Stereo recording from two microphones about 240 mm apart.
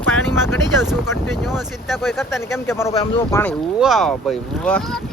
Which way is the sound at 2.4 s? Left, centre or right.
Centre.